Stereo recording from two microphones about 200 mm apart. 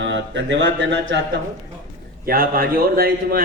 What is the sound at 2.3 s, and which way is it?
A man's voice, 45° right (ahead or behind).